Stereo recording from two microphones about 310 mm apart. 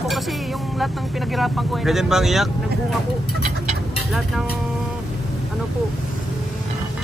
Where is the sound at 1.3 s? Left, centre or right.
Centre.